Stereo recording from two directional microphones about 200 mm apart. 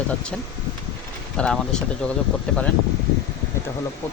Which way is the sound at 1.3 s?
5° left (ahead or behind).